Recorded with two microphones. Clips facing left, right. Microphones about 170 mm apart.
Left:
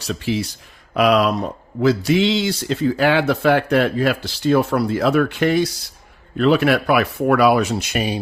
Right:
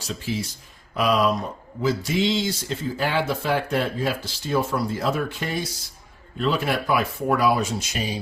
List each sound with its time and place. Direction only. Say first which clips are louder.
0.0 s speech: left 6 dB; 70° left (ahead or behind)